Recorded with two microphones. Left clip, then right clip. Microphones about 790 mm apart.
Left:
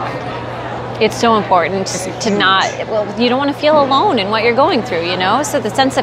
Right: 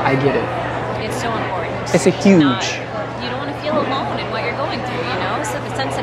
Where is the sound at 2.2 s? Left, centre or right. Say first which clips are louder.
Left 2 dB; left.